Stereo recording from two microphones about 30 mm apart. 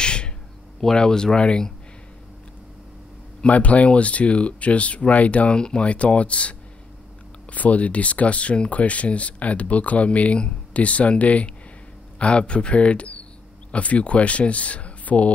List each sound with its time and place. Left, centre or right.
0.0 s a sound: left
0.9 s speech: left
3.4 s speech: left
5.5 s speech: left
5.9 s speech: left
7.5 s speech: left